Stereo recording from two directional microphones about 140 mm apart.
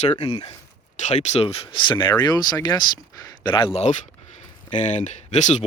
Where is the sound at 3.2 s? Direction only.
35° left (ahead or behind).